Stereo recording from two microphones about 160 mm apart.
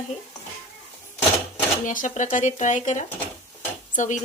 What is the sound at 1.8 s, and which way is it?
Speech, 55° left (ahead or behind).